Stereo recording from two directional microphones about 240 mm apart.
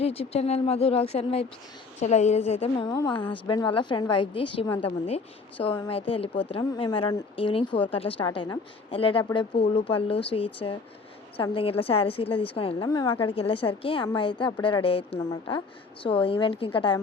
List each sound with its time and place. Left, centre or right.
0.0 s a woman's voice: left